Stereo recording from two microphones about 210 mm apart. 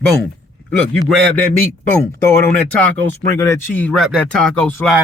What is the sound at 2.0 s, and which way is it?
Speech, 10° left (ahead or behind).